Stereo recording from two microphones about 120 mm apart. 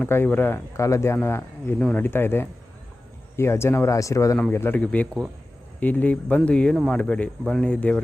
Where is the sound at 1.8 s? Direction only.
10° left (ahead or behind).